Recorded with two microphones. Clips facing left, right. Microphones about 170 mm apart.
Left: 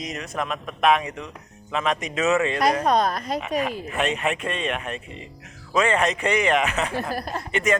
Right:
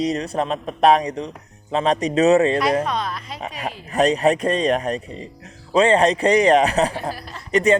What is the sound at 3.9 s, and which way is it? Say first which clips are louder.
Speech: right 12 dB; 40° right (ahead or behind).